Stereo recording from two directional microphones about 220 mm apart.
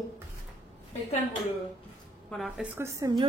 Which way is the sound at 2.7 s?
20° right (ahead or behind).